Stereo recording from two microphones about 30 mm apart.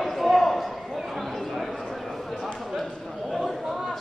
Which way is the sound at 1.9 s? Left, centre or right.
Centre.